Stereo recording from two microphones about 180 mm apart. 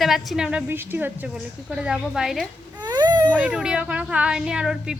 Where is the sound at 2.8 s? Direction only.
25° right (ahead or behind).